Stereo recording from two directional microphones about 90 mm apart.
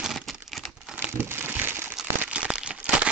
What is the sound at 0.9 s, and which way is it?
Crumpling, 25° right (ahead or behind).